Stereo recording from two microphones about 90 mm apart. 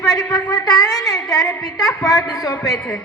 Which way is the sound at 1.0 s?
40° left (ahead or behind).